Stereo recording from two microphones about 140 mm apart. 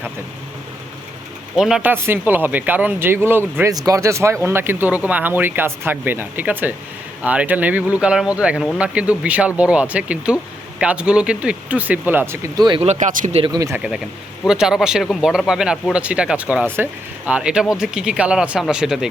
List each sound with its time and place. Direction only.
1.5 s speech: 5° right (ahead or behind)
12.5 s speech: 35° right (ahead or behind)
12.8 s speech: 55° right (ahead or behind)
13.4 s speech: 30° right (ahead or behind)
13.7 s speech: 5° right (ahead or behind)